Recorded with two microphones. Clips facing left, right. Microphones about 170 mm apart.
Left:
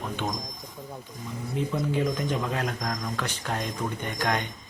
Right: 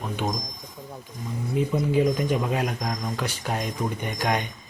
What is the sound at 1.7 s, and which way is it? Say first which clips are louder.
Speech: right 5 dB; 15° right (ahead or behind).